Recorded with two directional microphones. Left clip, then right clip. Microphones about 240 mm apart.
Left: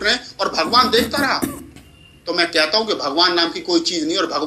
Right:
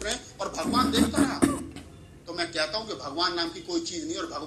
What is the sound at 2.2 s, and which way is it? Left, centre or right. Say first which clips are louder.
A man's voice: left 12 dB; left.